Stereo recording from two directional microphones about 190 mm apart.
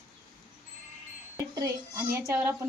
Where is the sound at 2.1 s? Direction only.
10° right (ahead or behind).